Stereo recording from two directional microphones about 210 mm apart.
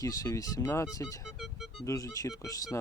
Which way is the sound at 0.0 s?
15° left (ahead or behind).